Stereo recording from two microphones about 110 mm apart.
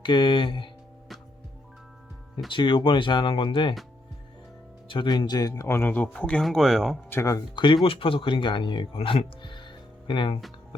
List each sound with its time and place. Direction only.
0.0 s speech: 45° left (ahead or behind)
2.5 s speech: 50° left (ahead or behind)
4.9 s speech: 45° left (ahead or behind); by 7.0 s centre (ahead or behind)
7.1 s speech: 25° left (ahead or behind)
7.5 s speech: 45° left (ahead or behind)